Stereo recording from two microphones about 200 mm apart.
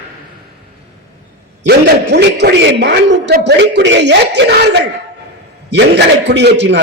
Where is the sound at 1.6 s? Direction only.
60° right (ahead or behind).